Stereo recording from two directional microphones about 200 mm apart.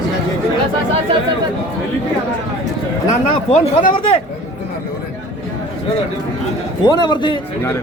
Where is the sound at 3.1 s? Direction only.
40° left (ahead or behind).